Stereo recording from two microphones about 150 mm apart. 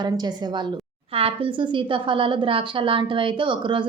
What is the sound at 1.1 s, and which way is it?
A woman's voice, 35° right (ahead or behind).